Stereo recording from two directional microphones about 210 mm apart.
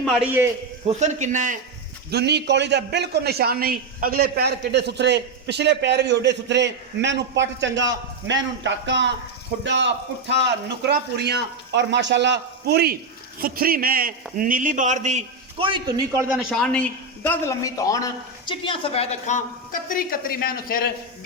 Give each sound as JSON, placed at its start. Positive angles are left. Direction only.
{"t": 0.0, "sound": "a man's voice", "side_deg": 0}
{"t": 0.9, "sound": "a man's voice", "side_deg": -35}
{"t": 2.0, "sound": "a man's voice", "side_deg": -50}
{"t": 16.1, "sound": "a man's voice", "side_deg": -5}